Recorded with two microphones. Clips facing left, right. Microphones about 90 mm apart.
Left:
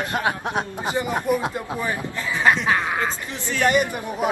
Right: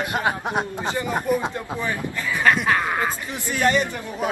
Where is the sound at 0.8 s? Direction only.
15° left (ahead or behind); by 3.1 s 5° right (ahead or behind).